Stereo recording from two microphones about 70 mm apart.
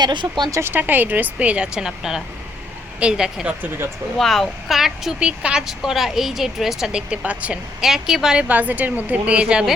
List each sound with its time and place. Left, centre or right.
0.0 s speech: right
0.6 s speech: right; by 3.4 s centre
4.2 s speech: centre
5.2 s speech: centre
7.8 s speech: centre
8.4 s speech: right